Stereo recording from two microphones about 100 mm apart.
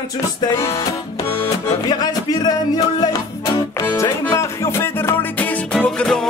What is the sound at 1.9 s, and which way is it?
Music, 40° left (ahead or behind).